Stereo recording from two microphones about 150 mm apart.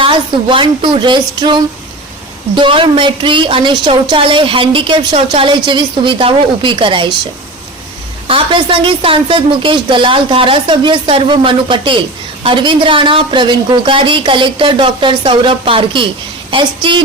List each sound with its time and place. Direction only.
0.0 s a woman's voice: 35° right (ahead or behind)
8.3 s a woman's voice: 35° right (ahead or behind)